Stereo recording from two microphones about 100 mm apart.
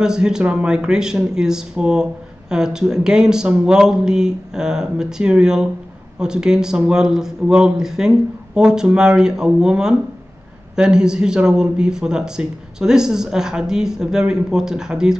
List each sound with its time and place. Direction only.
0.0 s speech: 5° right (ahead or behind)